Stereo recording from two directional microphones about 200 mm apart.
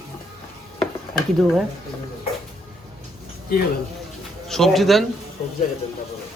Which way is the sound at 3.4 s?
45° left (ahead or behind).